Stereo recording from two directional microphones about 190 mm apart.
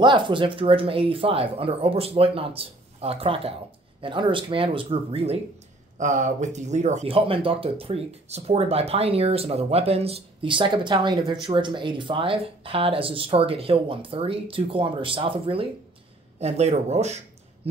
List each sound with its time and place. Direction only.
0.0 s speech: 25° right (ahead or behind)